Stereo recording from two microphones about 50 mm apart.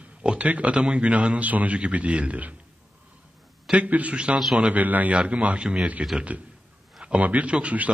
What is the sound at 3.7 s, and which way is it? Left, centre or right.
Speech, right.